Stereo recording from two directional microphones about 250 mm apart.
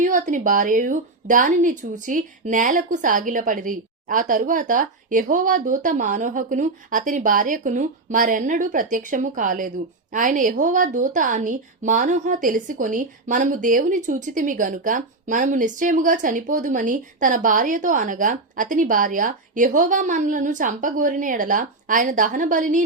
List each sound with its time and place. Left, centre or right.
0.0 s speech: right